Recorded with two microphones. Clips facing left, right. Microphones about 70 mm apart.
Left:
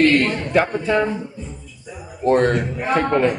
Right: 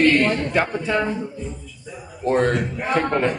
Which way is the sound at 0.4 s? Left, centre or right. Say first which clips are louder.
Left 3 dB; centre.